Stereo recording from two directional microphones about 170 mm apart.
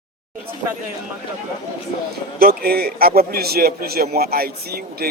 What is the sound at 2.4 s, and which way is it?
A man's voice, 60° right (ahead or behind).